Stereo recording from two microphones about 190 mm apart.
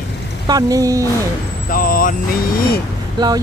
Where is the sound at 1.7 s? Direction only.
50° left (ahead or behind).